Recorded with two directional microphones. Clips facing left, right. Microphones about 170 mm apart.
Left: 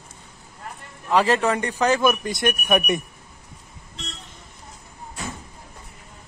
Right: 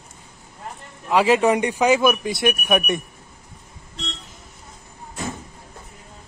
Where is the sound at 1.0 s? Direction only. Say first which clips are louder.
Right 3 dB; 10° right (ahead or behind).